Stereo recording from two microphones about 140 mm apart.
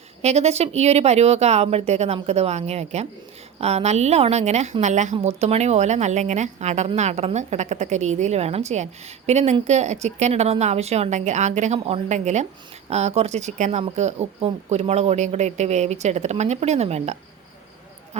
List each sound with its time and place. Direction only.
0.2 s a woman's voice: 50° right (ahead or behind)